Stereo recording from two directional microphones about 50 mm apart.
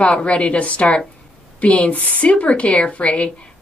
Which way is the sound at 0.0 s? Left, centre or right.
Left.